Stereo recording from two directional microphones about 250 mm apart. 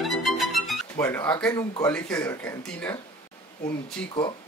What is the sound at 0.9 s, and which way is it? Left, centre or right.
Speech, centre.